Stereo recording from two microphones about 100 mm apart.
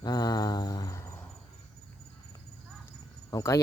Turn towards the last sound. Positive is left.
turn(degrees=35)  # may be behind; listen again after turning